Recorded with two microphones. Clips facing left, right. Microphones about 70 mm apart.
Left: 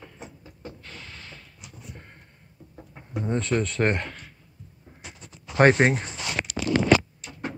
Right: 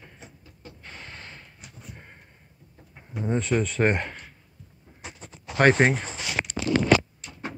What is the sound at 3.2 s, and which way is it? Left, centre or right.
Speech, centre.